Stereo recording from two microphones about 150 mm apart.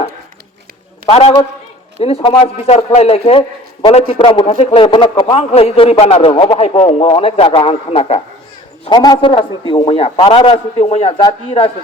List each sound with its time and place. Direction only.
1.0 s a man's voice: 40° left (ahead or behind)
8.8 s a man's voice: 30° left (ahead or behind); by 11.1 s 45° left (ahead or behind)
11.2 s a man's voice: 35° left (ahead or behind)